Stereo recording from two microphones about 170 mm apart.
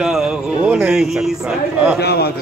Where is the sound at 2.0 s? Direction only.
75° left (ahead or behind).